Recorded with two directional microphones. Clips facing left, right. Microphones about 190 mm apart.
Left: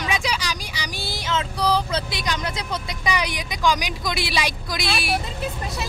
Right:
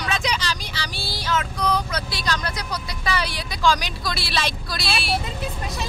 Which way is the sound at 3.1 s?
15° left (ahead or behind).